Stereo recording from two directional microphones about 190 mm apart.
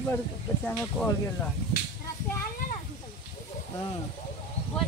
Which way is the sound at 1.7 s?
55° left (ahead or behind).